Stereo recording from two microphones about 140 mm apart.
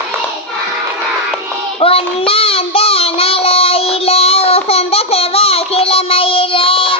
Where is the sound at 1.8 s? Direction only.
45° left (ahead or behind).